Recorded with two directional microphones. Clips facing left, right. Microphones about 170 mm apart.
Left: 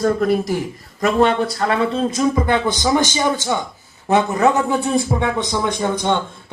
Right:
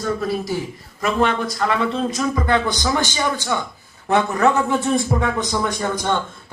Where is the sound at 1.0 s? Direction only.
35° left (ahead or behind).